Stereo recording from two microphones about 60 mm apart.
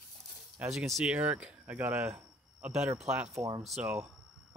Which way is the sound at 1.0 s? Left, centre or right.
Right.